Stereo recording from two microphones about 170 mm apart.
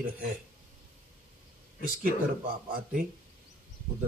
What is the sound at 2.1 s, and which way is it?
Speech, 55° right (ahead or behind).